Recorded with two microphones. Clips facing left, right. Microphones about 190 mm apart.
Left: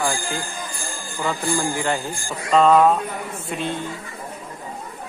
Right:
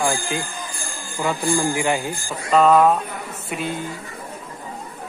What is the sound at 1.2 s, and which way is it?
Speech, 15° right (ahead or behind).